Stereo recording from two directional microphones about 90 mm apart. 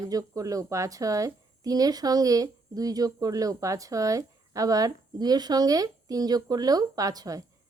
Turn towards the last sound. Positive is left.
turn(degrees=-40)  # may be behind; listen again after turning